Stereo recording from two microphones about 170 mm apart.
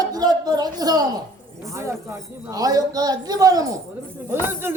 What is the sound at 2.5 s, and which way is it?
A woman's voice, 20° right (ahead or behind).